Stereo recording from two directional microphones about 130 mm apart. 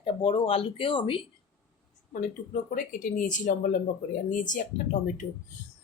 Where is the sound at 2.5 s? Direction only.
90° left.